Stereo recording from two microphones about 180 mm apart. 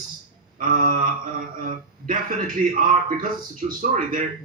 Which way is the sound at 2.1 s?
50° right (ahead or behind).